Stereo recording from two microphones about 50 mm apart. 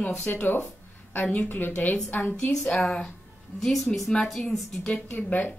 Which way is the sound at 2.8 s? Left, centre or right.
Centre.